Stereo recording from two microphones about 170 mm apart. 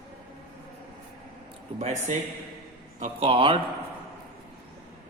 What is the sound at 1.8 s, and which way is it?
A man's voice, 45° right (ahead or behind).